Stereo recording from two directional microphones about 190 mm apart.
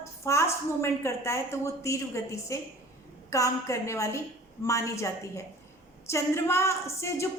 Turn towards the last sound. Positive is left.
turn(degrees=15)  # may be behind; listen again after turning